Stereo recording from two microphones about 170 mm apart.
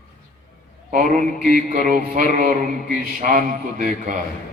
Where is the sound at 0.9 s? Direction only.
50° right (ahead or behind).